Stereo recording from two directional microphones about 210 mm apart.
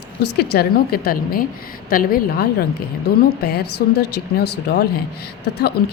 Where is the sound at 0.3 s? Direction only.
50° left (ahead or behind).